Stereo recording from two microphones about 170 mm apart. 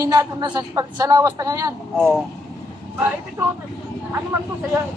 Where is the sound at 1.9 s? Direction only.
Centre (ahead or behind).